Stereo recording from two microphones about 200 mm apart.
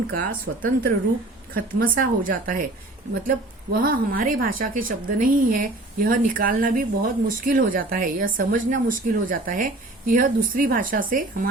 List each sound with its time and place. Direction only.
0.1 s a woman's voice: 45° right (ahead or behind)